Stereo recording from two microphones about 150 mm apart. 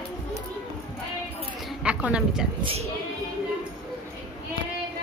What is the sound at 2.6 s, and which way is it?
Speech, 40° right (ahead or behind).